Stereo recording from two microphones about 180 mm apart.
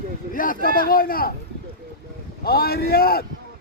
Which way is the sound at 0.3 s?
50° left (ahead or behind).